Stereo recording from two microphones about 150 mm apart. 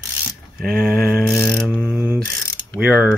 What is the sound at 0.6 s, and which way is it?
Speech, 5° right (ahead or behind).